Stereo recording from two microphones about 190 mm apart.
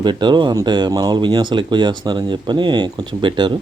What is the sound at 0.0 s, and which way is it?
Speech, 25° right (ahead or behind).